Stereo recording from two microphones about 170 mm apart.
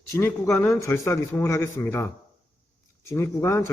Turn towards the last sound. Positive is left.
turn(degrees=15)  # may be behind; listen again after turning